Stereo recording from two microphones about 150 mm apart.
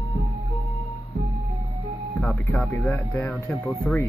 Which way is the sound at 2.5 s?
5° left (ahead or behind).